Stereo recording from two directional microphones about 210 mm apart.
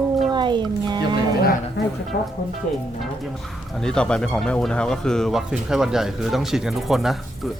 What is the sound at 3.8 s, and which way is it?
Speech, 5° left (ahead or behind).